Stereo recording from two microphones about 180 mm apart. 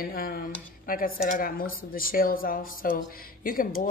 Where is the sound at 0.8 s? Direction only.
50° left (ahead or behind).